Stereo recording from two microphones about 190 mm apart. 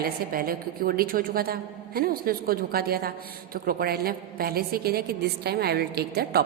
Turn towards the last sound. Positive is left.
turn(degrees=-55)  # may be behind; listen again after turning